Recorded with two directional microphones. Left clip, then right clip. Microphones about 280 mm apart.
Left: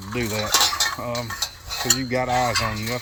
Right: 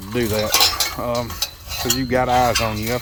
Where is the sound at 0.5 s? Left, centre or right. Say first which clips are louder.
Right 1 dB; right.